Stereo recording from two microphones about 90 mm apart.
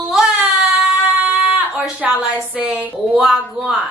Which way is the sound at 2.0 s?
15° right (ahead or behind).